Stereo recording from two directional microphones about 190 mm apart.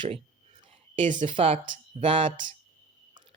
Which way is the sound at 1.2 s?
30° right (ahead or behind).